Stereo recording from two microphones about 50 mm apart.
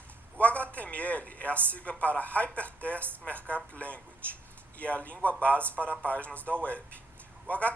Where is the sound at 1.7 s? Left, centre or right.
Left.